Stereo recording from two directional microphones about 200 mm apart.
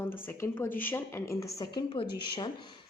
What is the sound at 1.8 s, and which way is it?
Speech, 25° left (ahead or behind).